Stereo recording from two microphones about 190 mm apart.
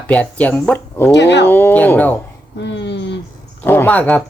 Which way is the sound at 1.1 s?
65° left (ahead or behind).